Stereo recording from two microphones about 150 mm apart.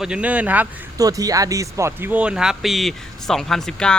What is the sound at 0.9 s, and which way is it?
Speech, 25° right (ahead or behind).